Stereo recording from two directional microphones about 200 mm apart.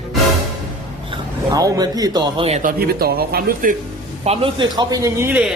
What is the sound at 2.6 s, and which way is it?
Speech, 45° right (ahead or behind).